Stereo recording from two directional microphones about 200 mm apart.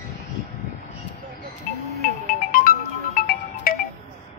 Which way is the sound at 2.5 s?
45° left (ahead or behind).